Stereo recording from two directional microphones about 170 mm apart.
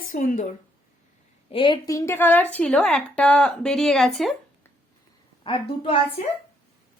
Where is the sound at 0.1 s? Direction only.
50° left (ahead or behind).